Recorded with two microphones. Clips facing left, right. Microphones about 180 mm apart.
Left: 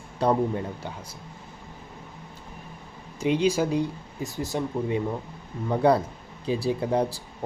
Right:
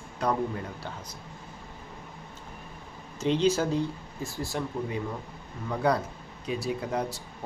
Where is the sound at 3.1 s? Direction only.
10° left (ahead or behind).